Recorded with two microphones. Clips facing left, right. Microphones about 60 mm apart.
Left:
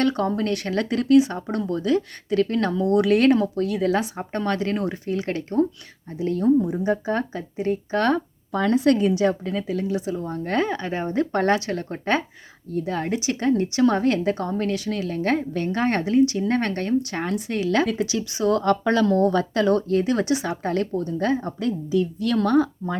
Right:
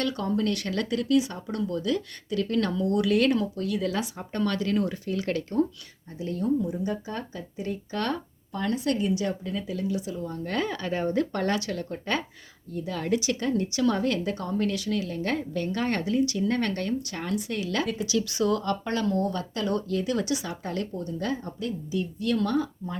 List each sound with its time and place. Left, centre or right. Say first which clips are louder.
0.0 s a woman's voice: left 5 dB; left
6.1 s a woman's voice: left 7 dB; left
8.5 s speech: left 8 dB; left
10.7 s speech: left 2 dB; left
11.3 s a woman's voice: left 6 dB; left
18.6 s speech: left 8 dB; left
19.9 s speech: left 6 dB; left
21.6 s a woman's voice: left 7 dB; left
22.4 s speech: left 9 dB; left